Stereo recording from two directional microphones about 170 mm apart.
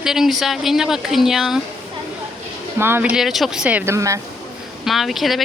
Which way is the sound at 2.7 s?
15° right (ahead or behind).